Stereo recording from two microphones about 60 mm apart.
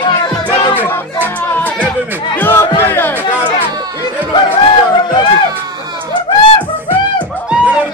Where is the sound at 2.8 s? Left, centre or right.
Left.